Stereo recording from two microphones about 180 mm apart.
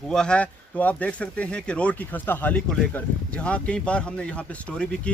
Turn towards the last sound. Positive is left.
turn(degrees=5)  # may be behind; listen again after turning